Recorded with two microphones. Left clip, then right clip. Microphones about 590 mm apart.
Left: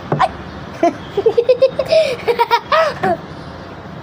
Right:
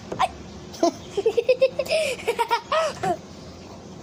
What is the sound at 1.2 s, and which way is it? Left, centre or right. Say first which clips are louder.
Baby laughter: left 8 dB; right.